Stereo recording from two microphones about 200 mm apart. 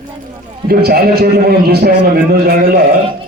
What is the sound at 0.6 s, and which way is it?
A man's voice, 50° right (ahead or behind).